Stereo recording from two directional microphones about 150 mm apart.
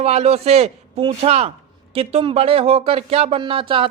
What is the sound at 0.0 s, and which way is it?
A man's voice, 45° right (ahead or behind).